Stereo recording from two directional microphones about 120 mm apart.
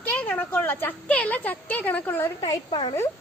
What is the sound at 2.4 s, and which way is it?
Speech, 40° left (ahead or behind).